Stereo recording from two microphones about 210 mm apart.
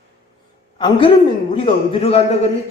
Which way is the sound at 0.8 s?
25° left (ahead or behind).